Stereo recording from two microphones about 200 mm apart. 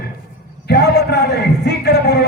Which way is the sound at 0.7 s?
55° left (ahead or behind).